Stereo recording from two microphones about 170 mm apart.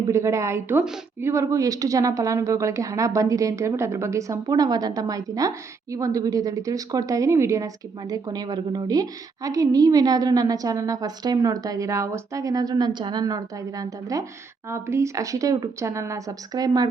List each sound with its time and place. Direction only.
0.1 s a woman's voice: 15° right (ahead or behind)